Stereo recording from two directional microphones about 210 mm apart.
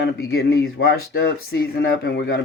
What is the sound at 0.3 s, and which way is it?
Speech, 50° left (ahead or behind).